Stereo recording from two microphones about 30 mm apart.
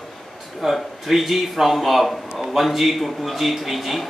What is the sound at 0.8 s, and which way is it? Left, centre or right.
A man's voice, centre.